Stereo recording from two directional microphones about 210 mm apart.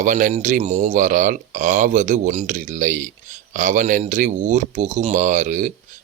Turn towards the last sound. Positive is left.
turn(degrees=-35)  # may be behind; listen again after turning